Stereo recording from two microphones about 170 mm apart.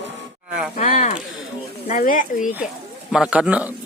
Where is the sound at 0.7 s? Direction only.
45° left (ahead or behind).